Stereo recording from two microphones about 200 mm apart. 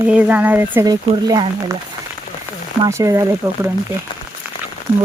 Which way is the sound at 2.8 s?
15° right (ahead or behind).